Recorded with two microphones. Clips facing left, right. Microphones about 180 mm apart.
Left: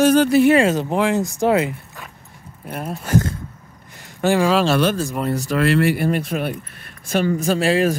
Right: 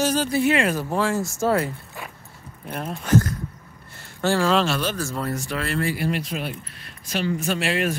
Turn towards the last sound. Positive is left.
turn(degrees=35)  # may be behind; listen again after turning